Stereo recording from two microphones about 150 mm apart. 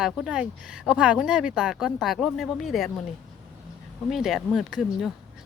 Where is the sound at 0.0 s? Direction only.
5° right (ahead or behind).